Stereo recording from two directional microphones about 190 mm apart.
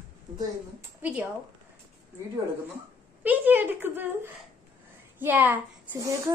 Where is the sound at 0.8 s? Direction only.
5° right (ahead or behind).